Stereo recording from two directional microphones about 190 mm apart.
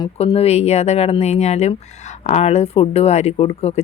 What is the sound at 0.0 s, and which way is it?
Speech, 30° left (ahead or behind).